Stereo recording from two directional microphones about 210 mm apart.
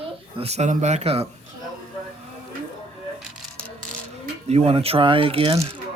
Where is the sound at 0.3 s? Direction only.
30° right (ahead or behind).